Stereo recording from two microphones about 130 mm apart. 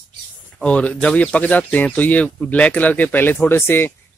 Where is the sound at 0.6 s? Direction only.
10° left (ahead or behind).